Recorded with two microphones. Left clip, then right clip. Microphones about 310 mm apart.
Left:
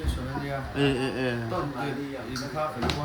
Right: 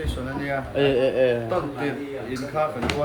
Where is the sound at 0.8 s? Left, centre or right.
Centre.